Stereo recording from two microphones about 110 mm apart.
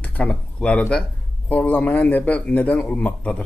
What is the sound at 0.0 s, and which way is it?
A man's voice, 10° left (ahead or behind).